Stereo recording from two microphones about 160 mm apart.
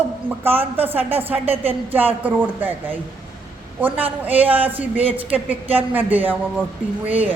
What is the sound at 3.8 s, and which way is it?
Speech, 10° right (ahead or behind).